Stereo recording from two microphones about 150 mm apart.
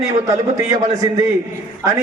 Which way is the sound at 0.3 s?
20° right (ahead or behind).